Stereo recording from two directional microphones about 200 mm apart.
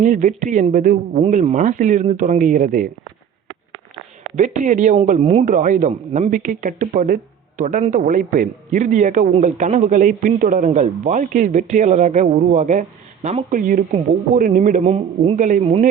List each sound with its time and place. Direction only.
0.0 s a man's voice: 40° right (ahead or behind)
4.4 s a man's voice: 40° right (ahead or behind)